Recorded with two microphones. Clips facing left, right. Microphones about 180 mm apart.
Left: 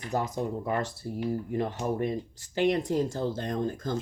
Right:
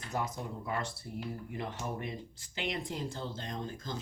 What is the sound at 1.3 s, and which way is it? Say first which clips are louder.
Speech: left 12 dB; 45° left (ahead or behind).